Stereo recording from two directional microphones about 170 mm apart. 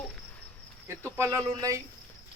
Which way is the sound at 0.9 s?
15° right (ahead or behind).